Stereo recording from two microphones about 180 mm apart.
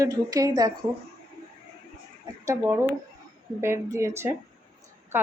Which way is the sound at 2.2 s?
15° right (ahead or behind).